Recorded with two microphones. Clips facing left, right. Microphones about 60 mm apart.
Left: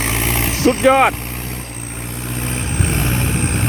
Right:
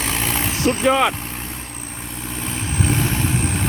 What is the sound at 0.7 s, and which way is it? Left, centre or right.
Speech, left.